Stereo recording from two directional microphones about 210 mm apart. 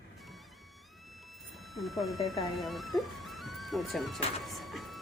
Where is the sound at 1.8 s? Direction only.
Centre (ahead or behind).